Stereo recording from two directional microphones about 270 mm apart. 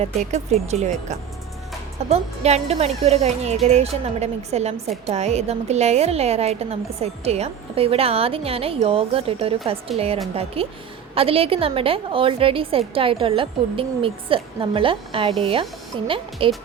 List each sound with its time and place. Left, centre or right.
0.0 s a woman's voice: right